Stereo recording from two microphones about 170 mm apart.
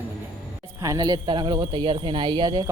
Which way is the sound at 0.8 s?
20° right (ahead or behind).